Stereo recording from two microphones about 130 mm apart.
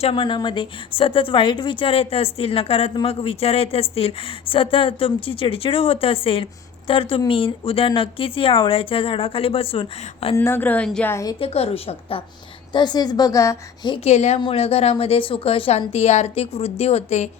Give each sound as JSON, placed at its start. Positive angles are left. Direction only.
{"t": 0.0, "sound": "a woman's voice", "side_deg": 40}
{"t": 10.3, "sound": "a woman's voice", "side_deg": 20}
{"t": 11.3, "sound": "a woman's voice", "side_deg": 50}
{"t": 12.7, "sound": "a woman's voice", "side_deg": 35}
{"t": 14.0, "sound": "speech", "side_deg": 55}
{"t": 14.3, "sound": "a woman's voice", "side_deg": 45}